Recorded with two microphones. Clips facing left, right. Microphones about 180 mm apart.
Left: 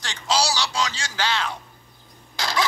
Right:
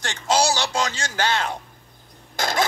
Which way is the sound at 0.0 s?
50° right (ahead or behind).